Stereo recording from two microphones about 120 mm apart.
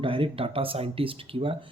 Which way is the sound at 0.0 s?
45° right (ahead or behind).